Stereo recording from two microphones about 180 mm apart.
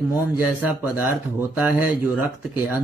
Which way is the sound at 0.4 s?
10° right (ahead or behind).